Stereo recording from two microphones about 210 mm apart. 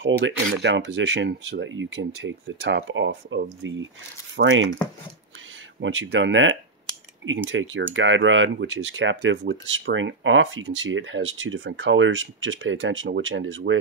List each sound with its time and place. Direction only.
0.0 s speech: 55° right (ahead or behind)
5.8 s speech: 60° right (ahead or behind)